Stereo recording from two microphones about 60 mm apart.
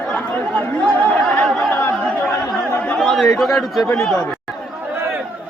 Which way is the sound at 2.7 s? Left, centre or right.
Left.